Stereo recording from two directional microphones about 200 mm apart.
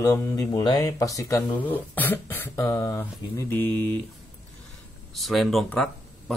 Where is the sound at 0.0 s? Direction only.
15° left (ahead or behind).